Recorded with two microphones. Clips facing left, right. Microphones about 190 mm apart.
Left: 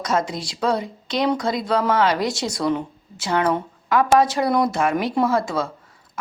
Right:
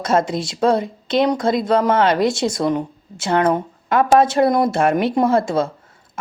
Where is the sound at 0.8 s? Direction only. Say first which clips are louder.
Right 5 dB; 55° right (ahead or behind).